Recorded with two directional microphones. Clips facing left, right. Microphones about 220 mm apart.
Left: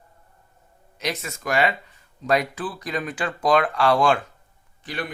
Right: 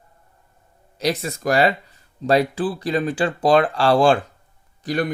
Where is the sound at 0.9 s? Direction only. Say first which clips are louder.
Right 7 dB; 35° right (ahead or behind).